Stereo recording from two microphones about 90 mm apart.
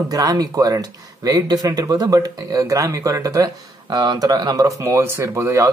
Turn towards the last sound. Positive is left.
turn(degrees=-30)  # may be behind; listen again after turning